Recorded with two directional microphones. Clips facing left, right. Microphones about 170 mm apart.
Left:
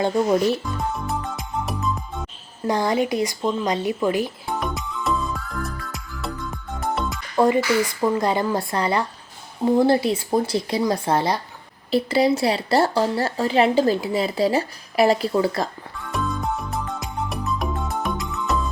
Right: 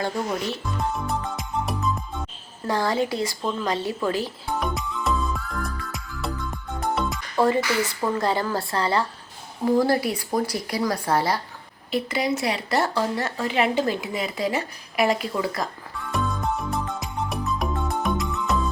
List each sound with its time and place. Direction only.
0.9 s music: centre (ahead or behind)
2.6 s speech: 15° left (ahead or behind)
4.6 s music: centre (ahead or behind)
7.3 s speech: 15° left (ahead or behind)
11.9 s a woman's voice: 30° left (ahead or behind)
16.1 s music: centre (ahead or behind)